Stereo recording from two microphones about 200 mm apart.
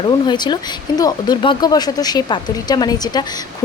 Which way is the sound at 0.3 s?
20° left (ahead or behind).